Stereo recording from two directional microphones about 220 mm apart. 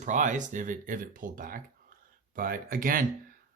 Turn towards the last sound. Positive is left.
turn(degrees=-40)  # may be behind; listen again after turning